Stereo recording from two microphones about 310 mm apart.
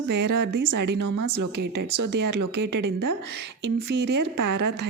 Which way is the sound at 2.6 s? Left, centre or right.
Right.